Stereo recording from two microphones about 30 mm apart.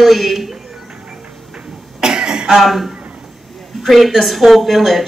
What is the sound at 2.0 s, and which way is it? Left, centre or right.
Cough, right.